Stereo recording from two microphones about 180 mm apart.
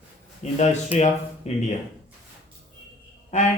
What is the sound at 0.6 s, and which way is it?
A man's voice, 35° left (ahead or behind).